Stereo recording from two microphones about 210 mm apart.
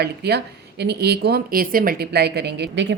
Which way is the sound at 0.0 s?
50° right (ahead or behind).